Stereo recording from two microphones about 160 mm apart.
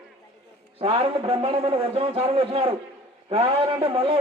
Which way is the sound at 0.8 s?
35° right (ahead or behind).